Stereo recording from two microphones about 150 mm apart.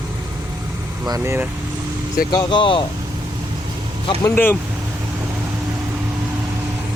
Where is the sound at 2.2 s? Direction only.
30° left (ahead or behind).